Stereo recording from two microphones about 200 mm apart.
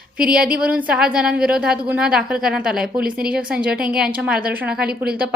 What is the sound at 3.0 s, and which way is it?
Speech, 45° right (ahead or behind).